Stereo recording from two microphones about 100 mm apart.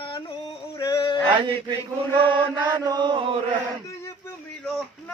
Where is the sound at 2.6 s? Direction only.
45° right (ahead or behind).